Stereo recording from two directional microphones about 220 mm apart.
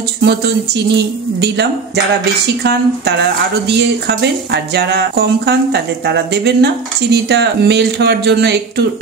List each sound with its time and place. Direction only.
0.2 s speech: 50° right (ahead or behind)
2.6 s speech: 50° right (ahead or behind)